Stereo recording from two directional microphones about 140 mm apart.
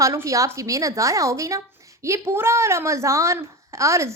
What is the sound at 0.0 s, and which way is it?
A woman's voice, 20° right (ahead or behind).